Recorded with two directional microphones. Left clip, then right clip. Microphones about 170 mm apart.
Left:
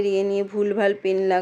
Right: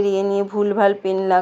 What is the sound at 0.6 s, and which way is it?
Speech, 25° left (ahead or behind).